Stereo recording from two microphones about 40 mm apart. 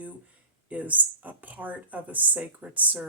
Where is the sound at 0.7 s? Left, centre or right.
Right.